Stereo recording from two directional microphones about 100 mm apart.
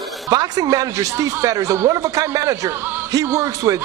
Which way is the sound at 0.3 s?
40° right (ahead or behind).